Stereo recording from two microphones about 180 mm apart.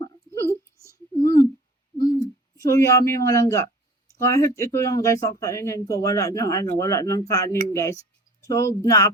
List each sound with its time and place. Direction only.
0.0 s a sound: 15° left (ahead or behind)
2.0 s hoot: 20° left (ahead or behind)
4.2 s speech: 15° left (ahead or behind)